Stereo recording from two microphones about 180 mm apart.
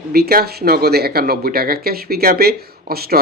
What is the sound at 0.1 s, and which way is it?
Speech, 55° right (ahead or behind).